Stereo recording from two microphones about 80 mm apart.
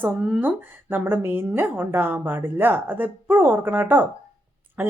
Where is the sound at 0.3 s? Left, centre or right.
Right.